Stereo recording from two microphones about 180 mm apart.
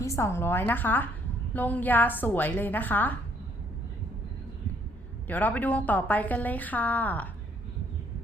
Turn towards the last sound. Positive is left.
turn(degrees=10)  # may be behind; listen again after turning